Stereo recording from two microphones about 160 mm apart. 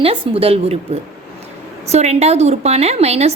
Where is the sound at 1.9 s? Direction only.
45° right (ahead or behind).